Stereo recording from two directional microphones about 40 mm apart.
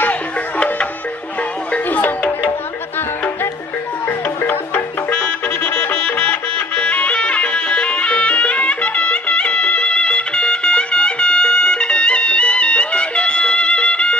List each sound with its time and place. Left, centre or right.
1.9 s music: left
6.8 s music: left